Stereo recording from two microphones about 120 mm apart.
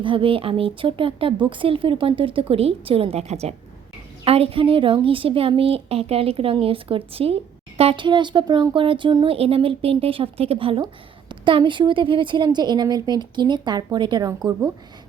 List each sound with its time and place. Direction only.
0.0 s a woman's voice: 45° right (ahead or behind); by 14.7 s 30° right (ahead or behind)